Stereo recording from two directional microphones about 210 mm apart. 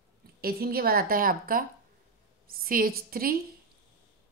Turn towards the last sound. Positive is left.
turn(degrees=-45)  # may be behind; listen again after turning